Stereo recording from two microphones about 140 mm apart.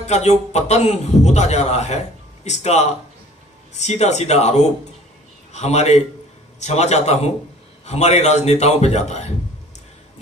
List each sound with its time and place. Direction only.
0.0 s a man's voice: 50° left (ahead or behind)